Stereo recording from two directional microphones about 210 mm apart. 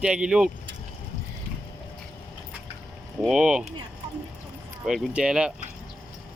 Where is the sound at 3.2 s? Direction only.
5° right (ahead or behind).